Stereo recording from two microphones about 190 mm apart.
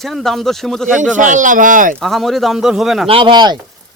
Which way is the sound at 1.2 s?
40° right (ahead or behind).